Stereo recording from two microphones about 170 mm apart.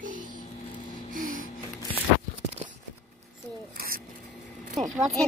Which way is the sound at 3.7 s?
60° right (ahead or behind).